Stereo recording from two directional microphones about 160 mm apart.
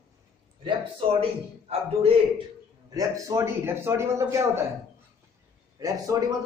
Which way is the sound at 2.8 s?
20° right (ahead or behind).